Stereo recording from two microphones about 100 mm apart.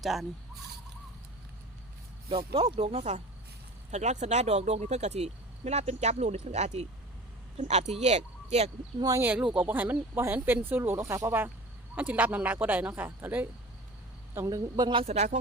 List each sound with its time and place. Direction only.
0.0 s speech: centre (ahead or behind)
2.3 s speech: 70° right (ahead or behind); by 3.2 s 90° right
4.4 s speech: 90° right
9.2 s speech: 10° right (ahead or behind)
14.3 s a woman's voice: 35° right (ahead or behind)
14.9 s speech: 90° right